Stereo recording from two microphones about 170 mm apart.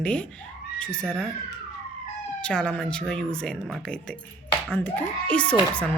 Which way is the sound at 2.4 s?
5° left (ahead or behind).